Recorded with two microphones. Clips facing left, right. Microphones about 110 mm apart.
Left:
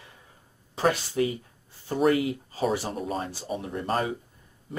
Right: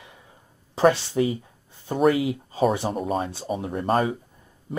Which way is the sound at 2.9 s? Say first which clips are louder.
Right 5 dB; 45° right (ahead or behind).